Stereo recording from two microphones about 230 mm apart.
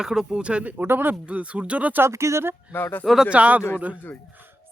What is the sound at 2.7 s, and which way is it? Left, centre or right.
A man's voice, centre.